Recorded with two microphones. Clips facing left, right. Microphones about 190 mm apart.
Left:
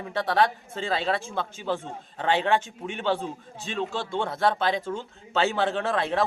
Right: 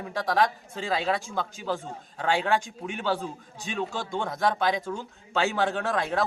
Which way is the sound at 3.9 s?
15° right (ahead or behind).